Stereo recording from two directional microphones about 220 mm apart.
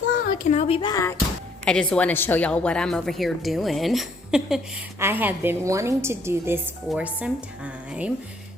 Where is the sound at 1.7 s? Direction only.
5° left (ahead or behind).